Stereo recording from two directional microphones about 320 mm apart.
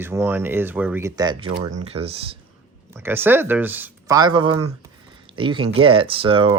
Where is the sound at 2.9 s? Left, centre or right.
Centre.